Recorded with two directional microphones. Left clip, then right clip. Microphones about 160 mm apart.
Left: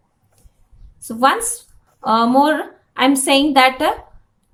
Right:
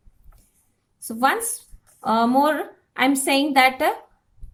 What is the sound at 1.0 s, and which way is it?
A woman's voice, 20° right (ahead or behind).